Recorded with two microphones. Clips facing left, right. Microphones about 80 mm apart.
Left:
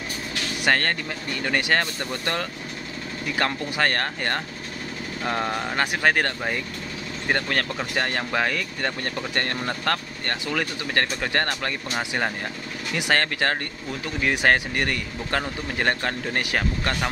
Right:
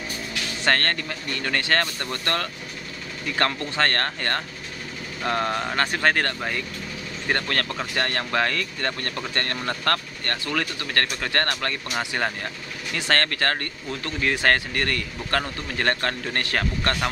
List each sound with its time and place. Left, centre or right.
0.7 s speech: centre